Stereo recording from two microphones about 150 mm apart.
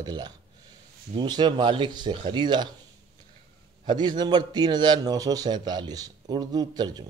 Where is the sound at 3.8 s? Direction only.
30° right (ahead or behind).